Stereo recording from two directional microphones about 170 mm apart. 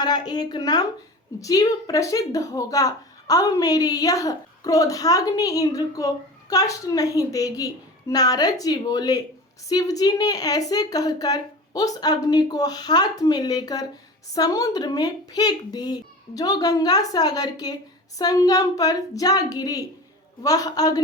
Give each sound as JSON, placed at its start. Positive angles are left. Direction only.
{"t": 0.0, "sound": "speech", "side_deg": 25}